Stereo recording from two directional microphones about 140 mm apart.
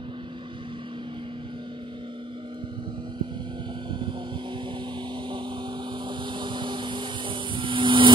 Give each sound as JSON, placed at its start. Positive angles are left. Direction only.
{"t": 6.0, "sound": "vehicle", "side_deg": -35}